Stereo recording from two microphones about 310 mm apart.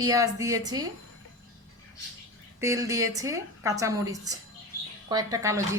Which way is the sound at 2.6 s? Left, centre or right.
Centre.